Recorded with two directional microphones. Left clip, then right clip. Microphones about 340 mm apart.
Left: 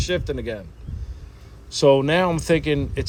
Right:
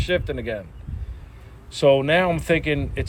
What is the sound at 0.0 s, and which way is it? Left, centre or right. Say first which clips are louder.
Speech: right 1 dB; centre.